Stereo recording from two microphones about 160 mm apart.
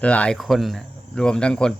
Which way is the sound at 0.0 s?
10° left (ahead or behind).